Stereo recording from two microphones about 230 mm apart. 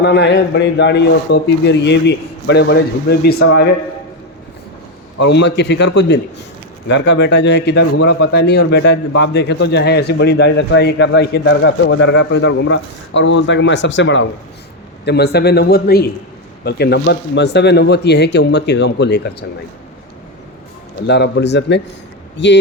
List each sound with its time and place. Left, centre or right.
0.0 s a man's voice: left
5.2 s a man's voice: left
21.1 s a man's voice: left